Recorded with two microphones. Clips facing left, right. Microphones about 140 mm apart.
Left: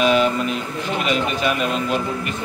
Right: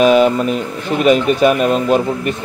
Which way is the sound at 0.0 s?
45° right (ahead or behind).